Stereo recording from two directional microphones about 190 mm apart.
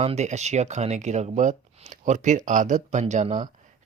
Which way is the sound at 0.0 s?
35° right (ahead or behind).